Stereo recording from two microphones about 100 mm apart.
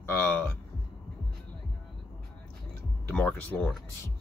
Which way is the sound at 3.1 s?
15° left (ahead or behind).